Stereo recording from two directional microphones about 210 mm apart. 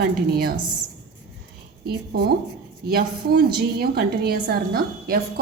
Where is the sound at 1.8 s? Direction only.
50° right (ahead or behind).